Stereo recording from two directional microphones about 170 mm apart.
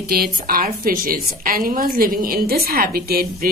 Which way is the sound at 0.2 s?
60° right (ahead or behind).